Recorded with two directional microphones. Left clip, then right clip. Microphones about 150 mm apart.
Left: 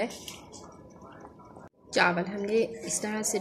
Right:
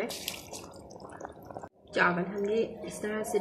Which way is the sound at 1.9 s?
35° left (ahead or behind).